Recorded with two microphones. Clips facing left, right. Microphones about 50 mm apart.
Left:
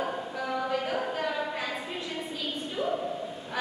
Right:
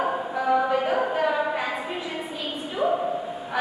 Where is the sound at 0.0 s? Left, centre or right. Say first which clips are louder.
Right 7 dB; right.